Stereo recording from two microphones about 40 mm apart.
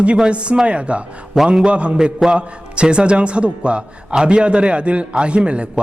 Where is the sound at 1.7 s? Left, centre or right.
Right.